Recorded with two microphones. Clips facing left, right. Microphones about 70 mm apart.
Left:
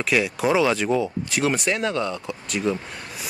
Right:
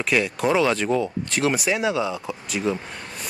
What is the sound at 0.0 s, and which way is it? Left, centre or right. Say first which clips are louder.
Speech: even; centre.